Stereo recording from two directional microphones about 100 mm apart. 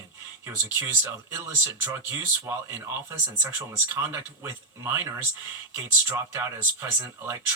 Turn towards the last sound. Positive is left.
turn(degrees=-20)  # may be behind; listen again after turning